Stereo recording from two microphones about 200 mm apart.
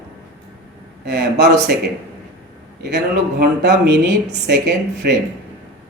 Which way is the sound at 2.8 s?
55° right (ahead or behind).